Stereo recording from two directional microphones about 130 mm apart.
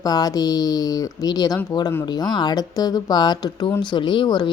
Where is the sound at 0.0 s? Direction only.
30° left (ahead or behind).